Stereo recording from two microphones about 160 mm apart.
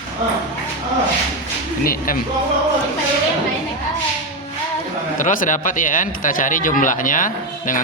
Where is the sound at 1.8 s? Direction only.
65° left (ahead or behind).